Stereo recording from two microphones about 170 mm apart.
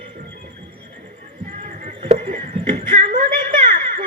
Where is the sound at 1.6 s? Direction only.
50° right (ahead or behind).